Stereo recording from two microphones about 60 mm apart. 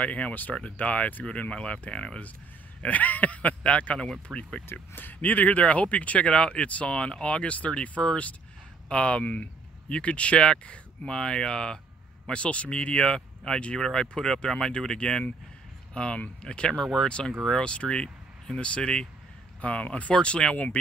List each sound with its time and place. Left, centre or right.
0.0 s speech: left
4.9 s speech: left
20.5 s speech: left